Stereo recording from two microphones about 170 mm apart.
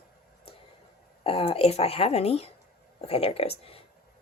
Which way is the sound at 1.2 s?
35° left (ahead or behind).